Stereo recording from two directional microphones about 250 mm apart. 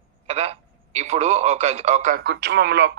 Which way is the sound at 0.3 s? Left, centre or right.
Right.